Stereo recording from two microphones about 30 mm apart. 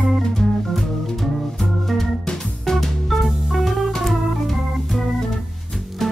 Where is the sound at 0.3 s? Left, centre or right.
Centre.